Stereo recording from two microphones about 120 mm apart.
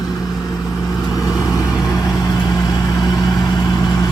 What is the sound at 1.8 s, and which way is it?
Vehicle, 30° left (ahead or behind).